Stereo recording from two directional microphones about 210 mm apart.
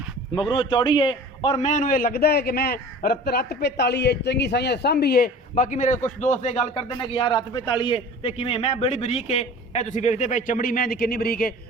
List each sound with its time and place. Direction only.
0.3 s a man's voice: 20° left (ahead or behind); by 11.5 s 45° left (ahead or behind)